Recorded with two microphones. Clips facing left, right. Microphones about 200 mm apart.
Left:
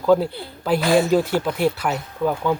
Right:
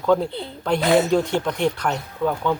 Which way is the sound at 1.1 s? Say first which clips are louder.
Left 1 dB; 5° left (ahead or behind).